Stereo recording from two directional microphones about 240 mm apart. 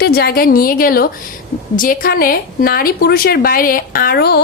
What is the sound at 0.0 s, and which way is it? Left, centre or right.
A woman's voice, left.